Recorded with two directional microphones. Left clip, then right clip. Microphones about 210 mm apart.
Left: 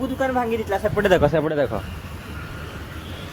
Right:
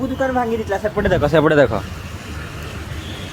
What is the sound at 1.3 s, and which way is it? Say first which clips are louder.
Speech: right 8 dB; 15° right (ahead or behind).